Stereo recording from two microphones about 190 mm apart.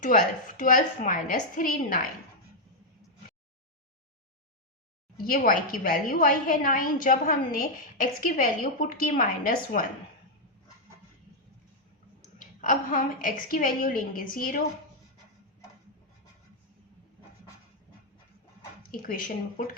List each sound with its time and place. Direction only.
0.0 s a woman's voice: 45° left (ahead or behind)
5.2 s a woman's voice: 45° left (ahead or behind)
12.4 s a woman's voice: 45° left (ahead or behind)
19.0 s a woman's voice: 45° left (ahead or behind)